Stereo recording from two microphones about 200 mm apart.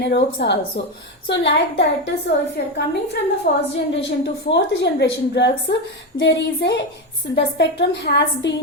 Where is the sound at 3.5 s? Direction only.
45° left (ahead or behind).